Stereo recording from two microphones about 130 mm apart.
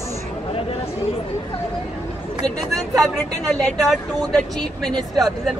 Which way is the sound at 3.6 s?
Centre (ahead or behind).